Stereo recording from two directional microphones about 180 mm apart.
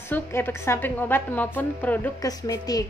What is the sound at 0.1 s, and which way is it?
A woman's voice, 15° left (ahead or behind).